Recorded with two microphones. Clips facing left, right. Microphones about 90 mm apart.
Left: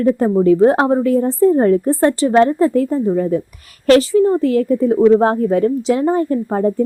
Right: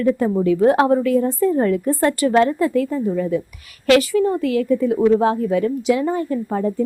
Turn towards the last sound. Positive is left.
turn(degrees=40)  # may be behind; listen again after turning